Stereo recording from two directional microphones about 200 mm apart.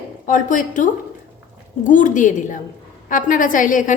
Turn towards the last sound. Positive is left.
turn(degrees=40)  # may be behind; listen again after turning